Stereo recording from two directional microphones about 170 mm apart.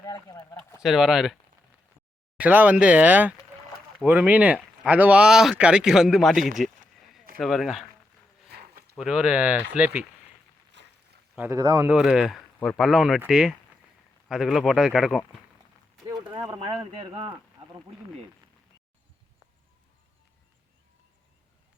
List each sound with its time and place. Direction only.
0.0 s speech: 25° left (ahead or behind)
0.8 s speech: centre (ahead or behind)
2.4 s speech: 10° right (ahead or behind)
6.5 s a sound: centre (ahead or behind)
7.3 s speech: centre (ahead or behind)
8.4 s a sound: 70° right (ahead or behind)
9.0 s speech: 5° right (ahead or behind)
10.8 s boat: 90° right
11.3 s speech: 15° right (ahead or behind)
11.9 s speech: 5° right (ahead or behind)
16.5 s speech: 30° right (ahead or behind)